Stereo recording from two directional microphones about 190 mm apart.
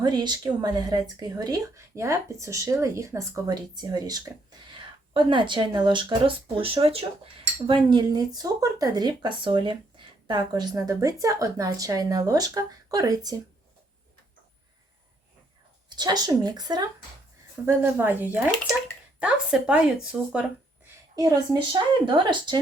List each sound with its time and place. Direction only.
0.0 s speech: 20° right (ahead or behind)
16.0 s speech: 20° right (ahead or behind)
17.7 s speech: 10° right (ahead or behind)
21.2 s speech: 20° right (ahead or behind)